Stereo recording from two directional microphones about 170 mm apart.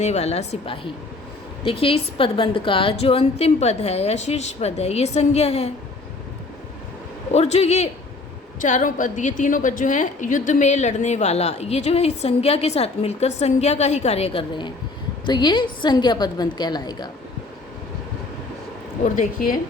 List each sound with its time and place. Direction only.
0.0 s a woman's voice: 40° left (ahead or behind)
7.3 s a woman's voice: 40° left (ahead or behind)
19.0 s a woman's voice: 45° left (ahead or behind)